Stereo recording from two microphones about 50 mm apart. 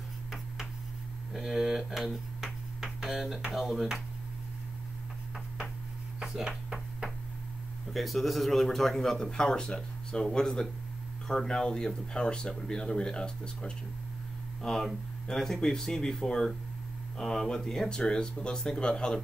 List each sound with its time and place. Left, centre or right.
1.3 s speech: centre
6.2 s a sound: centre
7.9 s speech: centre